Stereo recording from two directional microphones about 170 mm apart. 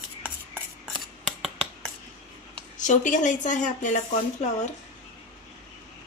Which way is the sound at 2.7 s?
45° left (ahead or behind).